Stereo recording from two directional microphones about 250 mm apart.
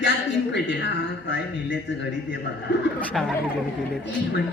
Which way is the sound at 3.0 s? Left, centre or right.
Centre.